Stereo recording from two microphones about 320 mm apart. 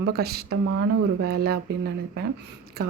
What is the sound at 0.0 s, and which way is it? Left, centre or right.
Speech, right.